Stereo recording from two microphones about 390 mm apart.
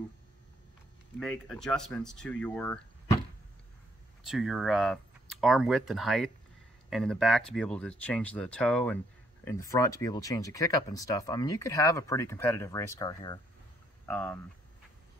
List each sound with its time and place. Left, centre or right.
1.2 s speech: centre
4.3 s speech: centre